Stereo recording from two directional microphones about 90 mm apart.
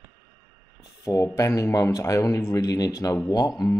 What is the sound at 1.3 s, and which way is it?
Speech, 40° left (ahead or behind).